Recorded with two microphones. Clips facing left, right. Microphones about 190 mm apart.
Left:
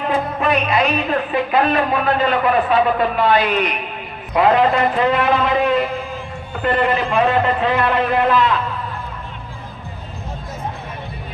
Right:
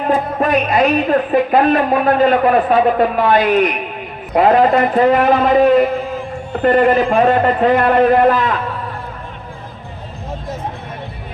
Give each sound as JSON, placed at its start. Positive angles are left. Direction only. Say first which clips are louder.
{"t": 0.1, "sound": "speech", "louder": "right 4 dB", "side_deg": -45}